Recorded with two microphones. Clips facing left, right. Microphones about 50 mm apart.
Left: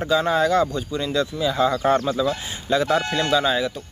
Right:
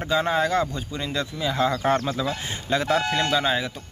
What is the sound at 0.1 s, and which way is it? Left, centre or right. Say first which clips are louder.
Speech: left 3 dB; right.